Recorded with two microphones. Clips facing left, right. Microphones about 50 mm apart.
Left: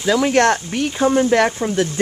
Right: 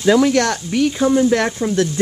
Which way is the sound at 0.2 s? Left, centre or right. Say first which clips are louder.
Left 1 dB; left.